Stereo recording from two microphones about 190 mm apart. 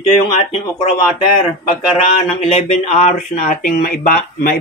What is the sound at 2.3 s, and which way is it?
Speech, 30° left (ahead or behind).